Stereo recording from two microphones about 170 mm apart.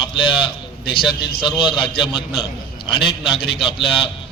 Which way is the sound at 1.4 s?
30° left (ahead or behind).